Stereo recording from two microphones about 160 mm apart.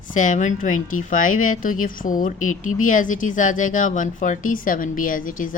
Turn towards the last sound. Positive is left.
turn(degrees=55)  # may be behind; listen again after turning